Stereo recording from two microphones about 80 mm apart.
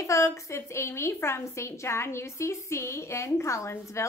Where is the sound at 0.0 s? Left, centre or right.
Left.